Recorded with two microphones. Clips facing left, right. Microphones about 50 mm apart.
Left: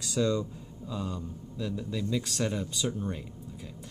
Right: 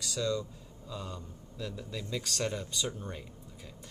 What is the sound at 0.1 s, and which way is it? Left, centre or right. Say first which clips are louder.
Speech: left 5 dB; centre.